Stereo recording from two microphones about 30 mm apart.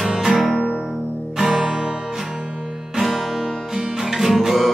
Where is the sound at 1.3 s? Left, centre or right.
Right.